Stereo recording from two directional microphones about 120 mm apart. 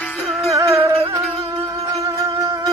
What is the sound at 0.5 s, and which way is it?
Music, 25° right (ahead or behind).